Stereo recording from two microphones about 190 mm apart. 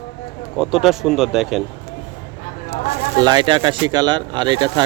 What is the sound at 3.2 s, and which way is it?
Speech, 20° right (ahead or behind).